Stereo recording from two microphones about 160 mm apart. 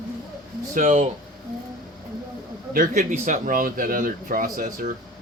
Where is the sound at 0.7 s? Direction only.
55° right (ahead or behind).